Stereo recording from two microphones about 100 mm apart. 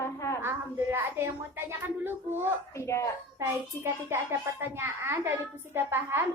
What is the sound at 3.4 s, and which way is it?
A woman's voice, 25° right (ahead or behind).